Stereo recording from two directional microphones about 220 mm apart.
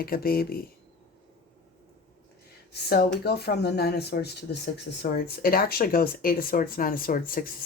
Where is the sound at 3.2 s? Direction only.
45° left (ahead or behind).